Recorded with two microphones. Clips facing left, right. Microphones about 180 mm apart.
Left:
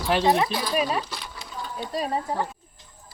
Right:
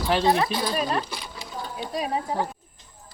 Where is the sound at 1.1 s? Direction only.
15° right (ahead or behind).